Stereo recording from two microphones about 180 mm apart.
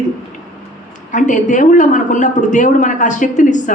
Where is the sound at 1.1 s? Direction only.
45° left (ahead or behind).